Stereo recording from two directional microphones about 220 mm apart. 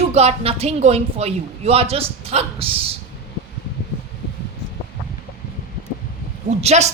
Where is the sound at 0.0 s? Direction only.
30° right (ahead or behind).